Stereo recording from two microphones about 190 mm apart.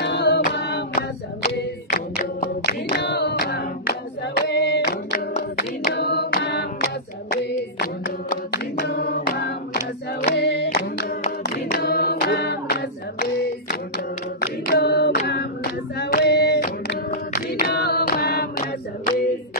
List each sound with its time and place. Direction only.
0.0 s music: 65° left (ahead or behind)
0.4 s singing: 60° left (ahead or behind)
1.9 s a capella: 50° left (ahead or behind)
4.4 s female singing: 65° left (ahead or behind)
4.8 s singing: 45° left (ahead or behind)